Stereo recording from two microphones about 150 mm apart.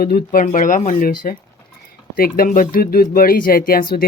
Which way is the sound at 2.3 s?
70° left (ahead or behind).